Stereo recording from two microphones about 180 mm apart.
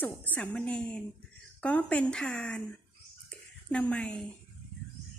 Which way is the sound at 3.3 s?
5° left (ahead or behind).